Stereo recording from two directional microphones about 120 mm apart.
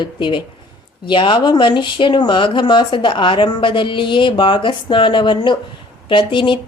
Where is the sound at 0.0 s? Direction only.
40° left (ahead or behind).